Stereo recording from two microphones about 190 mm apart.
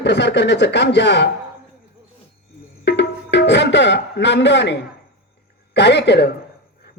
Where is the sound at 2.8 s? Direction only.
65° left (ahead or behind).